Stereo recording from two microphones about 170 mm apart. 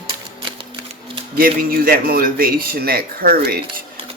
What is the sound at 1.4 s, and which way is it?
Speech, 60° right (ahead or behind).